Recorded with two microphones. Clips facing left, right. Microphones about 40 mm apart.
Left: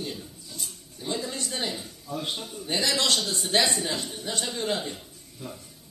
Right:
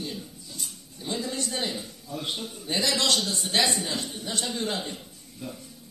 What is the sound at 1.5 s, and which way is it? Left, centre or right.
Speech, centre.